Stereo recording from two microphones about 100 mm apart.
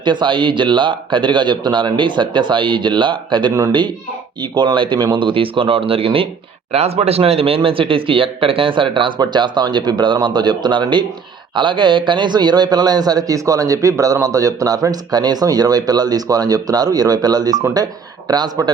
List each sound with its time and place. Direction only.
0.0 s a man's voice: 50° right (ahead or behind)
6.7 s speech: 90° right; by 9.1 s 60° right (ahead or behind)
9.1 s a man's voice: 45° right (ahead or behind)